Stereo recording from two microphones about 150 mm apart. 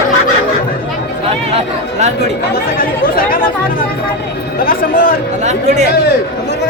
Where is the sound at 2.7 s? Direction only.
75° left (ahead or behind).